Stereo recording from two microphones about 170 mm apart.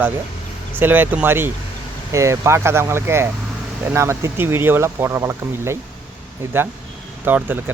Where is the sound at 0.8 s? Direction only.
10° right (ahead or behind).